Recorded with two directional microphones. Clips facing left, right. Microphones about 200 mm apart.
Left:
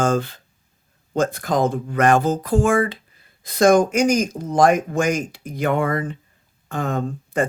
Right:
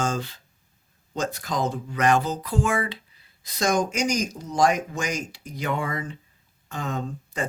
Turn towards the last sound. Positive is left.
turn(degrees=55)  # may be behind; listen again after turning